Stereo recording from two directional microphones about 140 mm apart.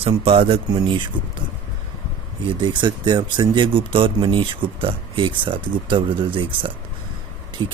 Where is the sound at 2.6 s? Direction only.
35° right (ahead or behind).